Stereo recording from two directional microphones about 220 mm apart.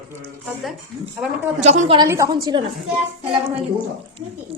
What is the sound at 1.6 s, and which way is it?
A woman's voice, 30° right (ahead or behind).